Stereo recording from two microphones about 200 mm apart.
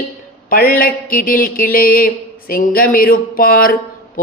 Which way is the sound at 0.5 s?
45° left (ahead or behind).